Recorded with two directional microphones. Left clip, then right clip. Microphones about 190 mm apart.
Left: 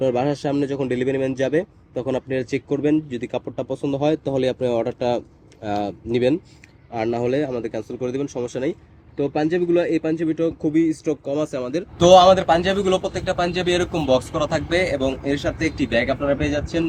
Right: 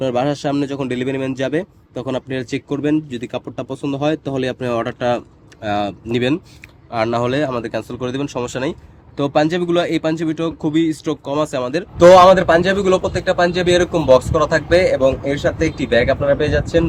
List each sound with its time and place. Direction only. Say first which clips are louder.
0.0 s a man's voice: right 2 dB; 40° right (ahead or behind)
9.1 s a man's voice: right 5 dB; 45° right (ahead or behind); by 11.9 s 20° right (ahead or behind)
11.9 s a man's voice: right 4 dB; 10° right (ahead or behind)